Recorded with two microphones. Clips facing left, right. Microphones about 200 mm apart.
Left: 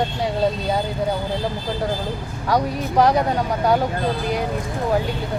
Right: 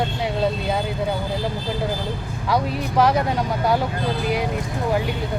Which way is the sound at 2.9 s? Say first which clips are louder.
Left 2 dB; 15° left (ahead or behind).